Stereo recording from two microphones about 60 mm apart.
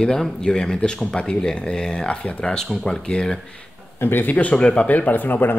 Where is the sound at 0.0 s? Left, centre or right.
Centre.